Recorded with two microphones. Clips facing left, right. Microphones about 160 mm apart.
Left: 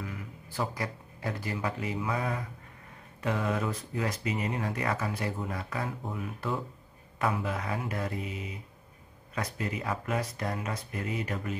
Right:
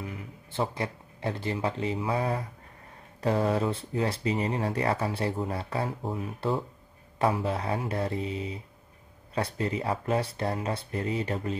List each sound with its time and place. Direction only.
0.0 s speech: 25° right (ahead or behind)